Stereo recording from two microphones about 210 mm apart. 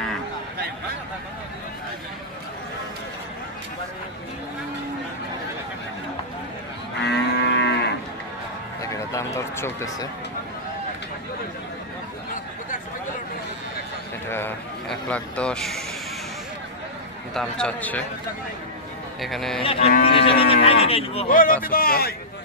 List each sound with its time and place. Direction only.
7.0 s livestock: 55° left (ahead or behind)
8.8 s speech: 15° left (ahead or behind)
14.3 s speech: 10° left (ahead or behind)
17.3 s speech: 5° left (ahead or behind)
19.2 s speech: centre (ahead or behind)
19.6 s livestock: 25° left (ahead or behind)
21.3 s a man's voice: 40° left (ahead or behind)